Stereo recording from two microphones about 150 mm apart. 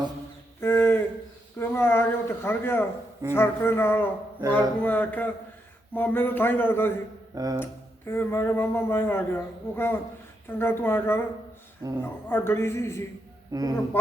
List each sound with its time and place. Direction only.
0.6 s a sound: 15° left (ahead or behind)
1.5 s speech: 15° left (ahead or behind)
7.3 s speech: 25° right (ahead or behind)
7.6 s speech: 15° left (ahead or behind)
13.5 s speech: 25° right (ahead or behind)
13.9 s speech: 15° left (ahead or behind)